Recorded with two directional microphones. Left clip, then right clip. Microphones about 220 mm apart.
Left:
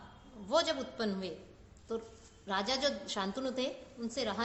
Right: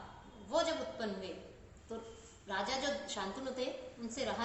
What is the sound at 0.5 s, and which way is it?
Speech, 55° left (ahead or behind).